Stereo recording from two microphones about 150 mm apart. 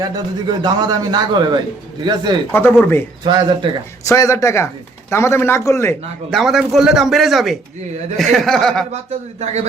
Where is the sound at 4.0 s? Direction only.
20° left (ahead or behind).